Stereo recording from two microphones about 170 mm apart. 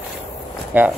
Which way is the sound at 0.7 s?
10° right (ahead or behind).